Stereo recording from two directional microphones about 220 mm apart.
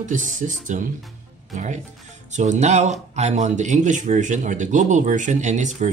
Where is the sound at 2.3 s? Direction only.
30° right (ahead or behind).